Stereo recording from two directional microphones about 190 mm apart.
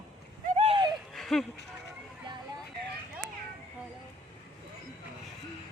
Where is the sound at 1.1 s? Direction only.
Centre (ahead or behind).